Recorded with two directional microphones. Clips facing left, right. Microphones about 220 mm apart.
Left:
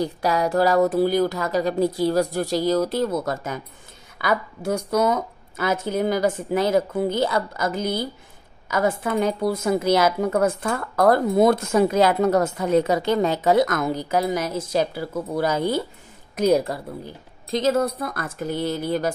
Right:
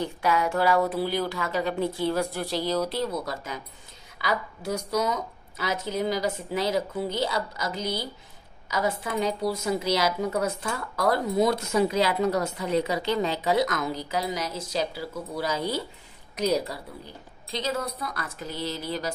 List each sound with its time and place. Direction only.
0.0 s a woman's voice: 40° left (ahead or behind)